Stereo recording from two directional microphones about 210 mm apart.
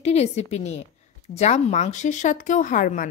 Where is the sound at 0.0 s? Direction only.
30° left (ahead or behind).